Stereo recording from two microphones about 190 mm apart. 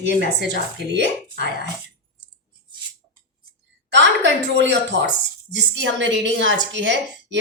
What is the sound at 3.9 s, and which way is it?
A woman's voice, 65° right (ahead or behind).